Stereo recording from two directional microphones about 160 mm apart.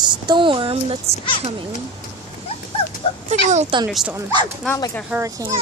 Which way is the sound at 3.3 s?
45° right (ahead or behind).